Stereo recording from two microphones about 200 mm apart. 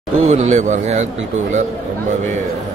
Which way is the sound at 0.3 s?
35° right (ahead or behind).